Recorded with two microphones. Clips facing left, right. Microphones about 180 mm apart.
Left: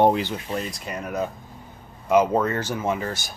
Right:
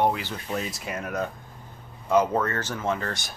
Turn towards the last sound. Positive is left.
turn(degrees=5)  # may be behind; listen again after turning